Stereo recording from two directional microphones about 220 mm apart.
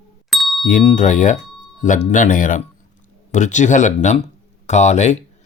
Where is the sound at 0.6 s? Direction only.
35° left (ahead or behind).